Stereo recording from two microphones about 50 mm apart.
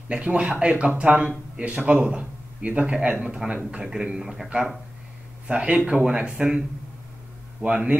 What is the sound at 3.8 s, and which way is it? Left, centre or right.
Speech, centre.